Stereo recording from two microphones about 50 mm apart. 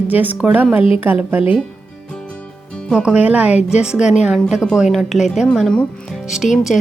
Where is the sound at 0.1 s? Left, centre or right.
Right.